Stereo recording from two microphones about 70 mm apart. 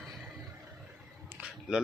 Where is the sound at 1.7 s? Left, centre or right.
Centre.